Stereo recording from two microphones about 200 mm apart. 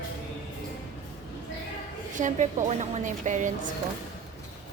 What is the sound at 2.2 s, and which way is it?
A woman's voice, 40° right (ahead or behind).